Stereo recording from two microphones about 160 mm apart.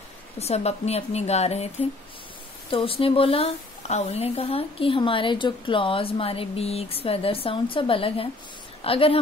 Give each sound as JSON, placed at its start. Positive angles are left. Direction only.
{"t": 0.4, "sound": "a woman's voice", "side_deg": 40}
{"t": 2.7, "sound": "a woman's voice", "side_deg": 35}